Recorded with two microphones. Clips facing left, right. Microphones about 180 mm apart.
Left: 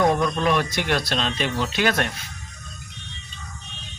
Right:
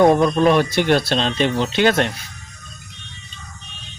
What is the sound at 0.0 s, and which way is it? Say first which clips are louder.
Speech: right 7 dB; 30° right (ahead or behind).